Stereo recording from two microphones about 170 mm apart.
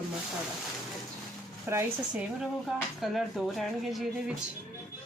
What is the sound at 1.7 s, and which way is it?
Speech, 15° right (ahead or behind).